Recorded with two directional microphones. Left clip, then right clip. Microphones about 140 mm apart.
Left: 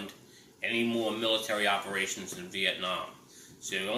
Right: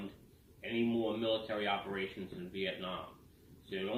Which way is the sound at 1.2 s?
15° left (ahead or behind).